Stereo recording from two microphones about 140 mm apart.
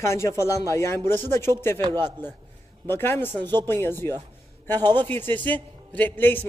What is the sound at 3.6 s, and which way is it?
A man's voice, 15° left (ahead or behind).